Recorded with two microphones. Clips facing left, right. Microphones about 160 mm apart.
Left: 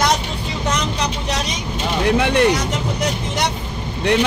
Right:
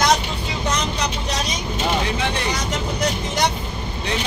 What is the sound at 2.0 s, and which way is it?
Speech, 60° left (ahead or behind).